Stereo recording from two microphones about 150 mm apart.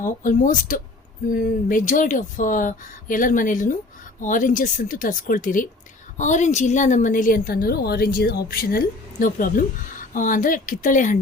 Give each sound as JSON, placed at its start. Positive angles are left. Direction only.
{"t": 0.0, "sound": "a woman's voice", "side_deg": 60}